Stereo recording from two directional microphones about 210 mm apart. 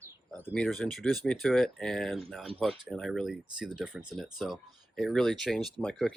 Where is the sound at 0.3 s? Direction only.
5° left (ahead or behind).